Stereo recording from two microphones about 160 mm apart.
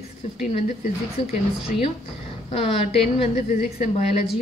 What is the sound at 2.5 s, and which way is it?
A woman's voice, 35° left (ahead or behind).